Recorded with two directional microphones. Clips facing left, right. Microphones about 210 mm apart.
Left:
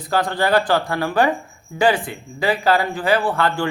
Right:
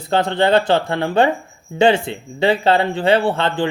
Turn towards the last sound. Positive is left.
turn(degrees=-25)  # may be behind; listen again after turning